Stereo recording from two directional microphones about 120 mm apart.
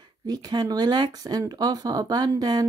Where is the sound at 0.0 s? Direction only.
35° right (ahead or behind).